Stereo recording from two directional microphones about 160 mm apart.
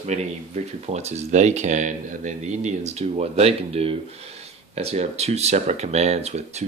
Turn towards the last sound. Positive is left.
turn(degrees=-45)  # may be behind; listen again after turning